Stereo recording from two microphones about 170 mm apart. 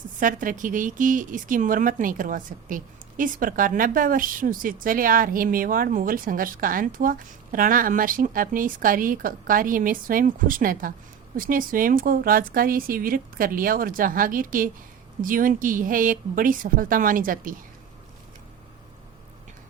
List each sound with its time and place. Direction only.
0.2 s a woman's voice: 50° right (ahead or behind)